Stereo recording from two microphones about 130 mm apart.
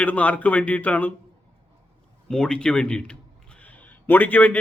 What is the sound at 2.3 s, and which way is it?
A man's voice, 5° left (ahead or behind).